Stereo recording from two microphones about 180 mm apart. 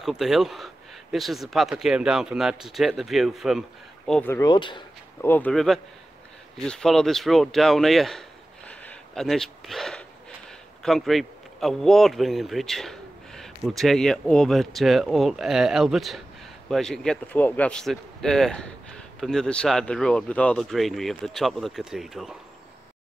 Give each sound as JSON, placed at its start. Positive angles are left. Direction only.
{"t": 0.0, "sound": "speech", "side_deg": 0}
{"t": 4.1, "sound": "speech", "side_deg": 10}
{"t": 5.2, "sound": "speech", "side_deg": 10}
{"t": 8.6, "sound": "a sound", "side_deg": 5}
{"t": 10.8, "sound": "speech", "side_deg": 0}